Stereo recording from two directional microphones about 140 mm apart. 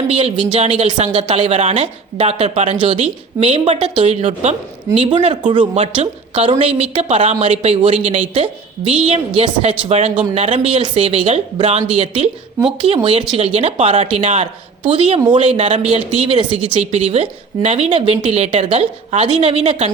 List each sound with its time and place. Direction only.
0.1 s a woman's voice: 45° right (ahead or behind)
3.8 s speech: 35° right (ahead or behind)
4.0 s a woman's voice: 50° right (ahead or behind)
8.3 s a woman's voice: 40° right (ahead or behind)